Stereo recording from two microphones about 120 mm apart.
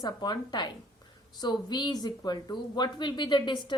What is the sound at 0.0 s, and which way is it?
A woman's voice, 35° left (ahead or behind).